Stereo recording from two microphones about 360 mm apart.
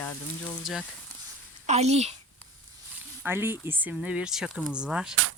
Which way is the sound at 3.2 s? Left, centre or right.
Centre.